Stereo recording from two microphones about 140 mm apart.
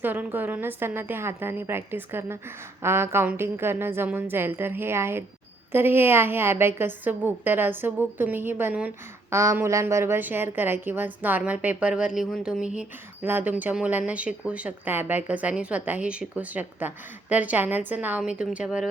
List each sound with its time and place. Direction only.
0.0 s a woman's voice: 15° right (ahead or behind)